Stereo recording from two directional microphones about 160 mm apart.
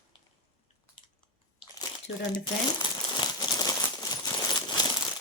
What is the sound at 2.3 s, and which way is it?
Crumpling, 30° left (ahead or behind).